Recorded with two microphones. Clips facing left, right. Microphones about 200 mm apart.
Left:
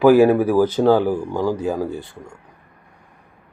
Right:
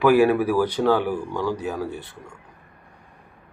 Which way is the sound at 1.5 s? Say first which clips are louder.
Left 5 dB; 25° left (ahead or behind).